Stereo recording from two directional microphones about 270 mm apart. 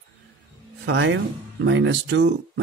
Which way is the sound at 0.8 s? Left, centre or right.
Right.